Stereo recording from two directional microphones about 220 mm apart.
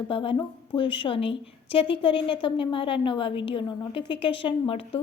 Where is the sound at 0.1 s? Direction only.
25° left (ahead or behind).